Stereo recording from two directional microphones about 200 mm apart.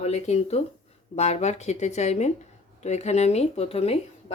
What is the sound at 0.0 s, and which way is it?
Speech, 35° left (ahead or behind).